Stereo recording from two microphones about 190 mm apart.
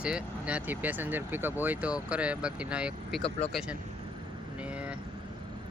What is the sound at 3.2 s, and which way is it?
Speech, 30° left (ahead or behind).